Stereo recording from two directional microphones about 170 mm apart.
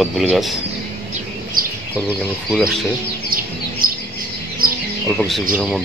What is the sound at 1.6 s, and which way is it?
Bird, 55° right (ahead or behind).